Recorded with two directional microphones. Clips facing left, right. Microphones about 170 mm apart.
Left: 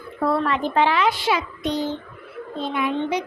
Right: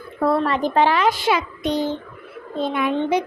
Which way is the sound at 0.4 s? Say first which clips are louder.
Right 2 dB; 40° right (ahead or behind).